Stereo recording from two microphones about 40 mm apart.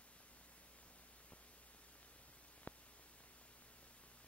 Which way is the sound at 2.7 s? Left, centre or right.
Left.